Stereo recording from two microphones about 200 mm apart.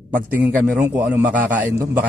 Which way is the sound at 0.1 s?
10° right (ahead or behind).